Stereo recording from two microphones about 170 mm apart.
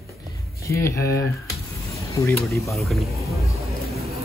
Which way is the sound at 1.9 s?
15° left (ahead or behind).